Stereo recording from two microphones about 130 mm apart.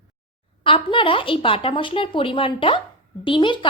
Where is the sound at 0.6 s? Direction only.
40° left (ahead or behind).